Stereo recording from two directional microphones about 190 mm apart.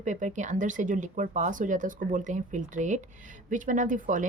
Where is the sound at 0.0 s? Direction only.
40° right (ahead or behind).